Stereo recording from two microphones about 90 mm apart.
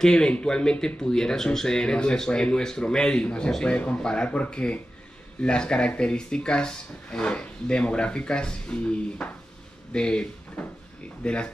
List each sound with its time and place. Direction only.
0.0 s speech: 10° left (ahead or behind)